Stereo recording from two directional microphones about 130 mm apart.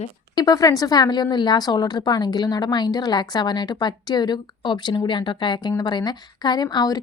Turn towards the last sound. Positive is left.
turn(degrees=30)  # may be behind; listen again after turning